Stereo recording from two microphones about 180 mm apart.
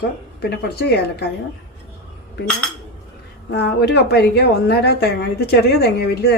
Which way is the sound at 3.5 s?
65° left (ahead or behind).